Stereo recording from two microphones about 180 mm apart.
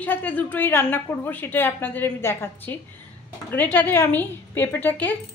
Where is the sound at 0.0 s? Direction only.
10° left (ahead or behind).